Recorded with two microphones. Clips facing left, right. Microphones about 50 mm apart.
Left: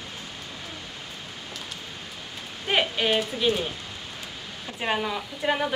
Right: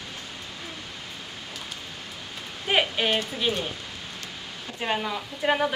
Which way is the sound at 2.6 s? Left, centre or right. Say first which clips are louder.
Even; centre.